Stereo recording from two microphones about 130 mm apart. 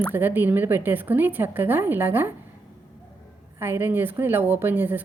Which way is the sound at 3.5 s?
15° right (ahead or behind).